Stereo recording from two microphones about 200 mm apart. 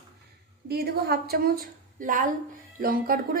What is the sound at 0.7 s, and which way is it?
A woman's voice, 50° right (ahead or behind).